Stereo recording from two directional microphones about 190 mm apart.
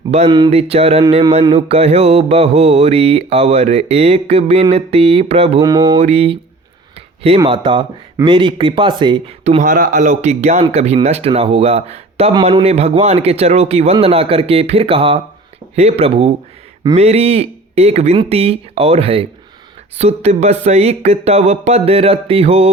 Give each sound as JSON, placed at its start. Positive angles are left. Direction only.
{"t": 0.1, "sound": "mantra", "side_deg": -30}
{"t": 5.6, "sound": "speech", "side_deg": -20}
{"t": 6.0, "sound": "mantra", "side_deg": -35}
{"t": 7.2, "sound": "speech", "side_deg": -30}
{"t": 9.4, "sound": "mantra", "side_deg": -35}